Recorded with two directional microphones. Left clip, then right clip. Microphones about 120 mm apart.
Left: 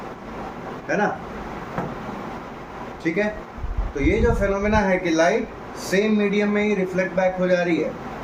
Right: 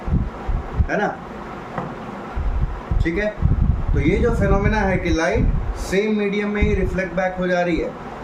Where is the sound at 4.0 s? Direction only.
35° right (ahead or behind).